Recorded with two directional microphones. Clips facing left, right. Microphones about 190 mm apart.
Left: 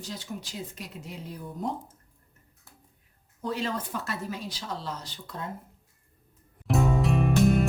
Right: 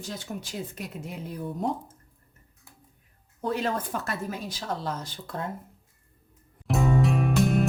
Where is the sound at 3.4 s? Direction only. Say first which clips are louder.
Right 3 dB; 55° right (ahead or behind).